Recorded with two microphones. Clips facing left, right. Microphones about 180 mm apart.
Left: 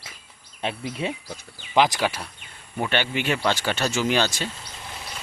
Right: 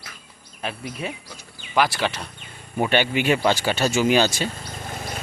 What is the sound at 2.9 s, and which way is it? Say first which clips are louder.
Speech: right 5 dB; 15° right (ahead or behind).